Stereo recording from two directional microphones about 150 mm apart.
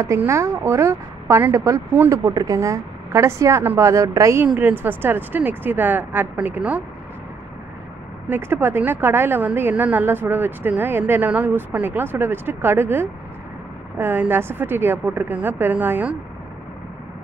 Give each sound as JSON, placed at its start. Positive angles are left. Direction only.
{"t": 0.0, "sound": "a woman's voice", "side_deg": -15}
{"t": 8.3, "sound": "a woman's voice", "side_deg": -15}